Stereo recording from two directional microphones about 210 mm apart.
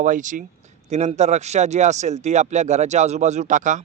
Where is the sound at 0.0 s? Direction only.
40° right (ahead or behind).